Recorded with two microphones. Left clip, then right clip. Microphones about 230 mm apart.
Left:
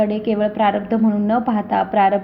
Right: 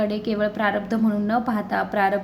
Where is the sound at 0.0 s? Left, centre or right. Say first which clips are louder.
Left 5 dB; centre.